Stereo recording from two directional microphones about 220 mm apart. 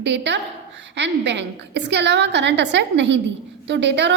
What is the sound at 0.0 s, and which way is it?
A woman's voice, 50° right (ahead or behind).